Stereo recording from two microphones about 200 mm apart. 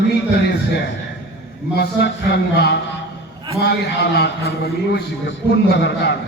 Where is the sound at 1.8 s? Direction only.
55° left (ahead or behind).